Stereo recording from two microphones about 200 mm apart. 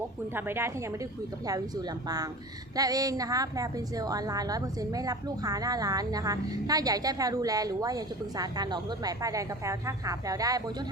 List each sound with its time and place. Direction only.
0.3 s a woman's voice: 10° right (ahead or behind)